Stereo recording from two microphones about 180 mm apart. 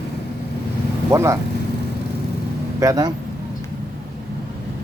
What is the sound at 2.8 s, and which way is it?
Speech, 20° right (ahead or behind).